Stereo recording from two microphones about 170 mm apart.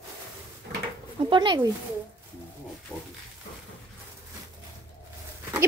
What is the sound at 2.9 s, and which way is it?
Pig, 10° left (ahead or behind).